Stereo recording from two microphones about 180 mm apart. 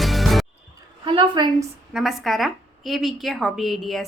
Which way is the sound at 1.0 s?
30° right (ahead or behind).